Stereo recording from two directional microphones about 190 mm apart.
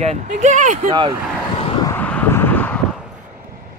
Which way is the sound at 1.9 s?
10° left (ahead or behind).